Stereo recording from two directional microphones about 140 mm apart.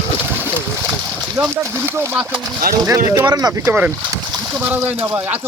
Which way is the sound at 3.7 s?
15° right (ahead or behind).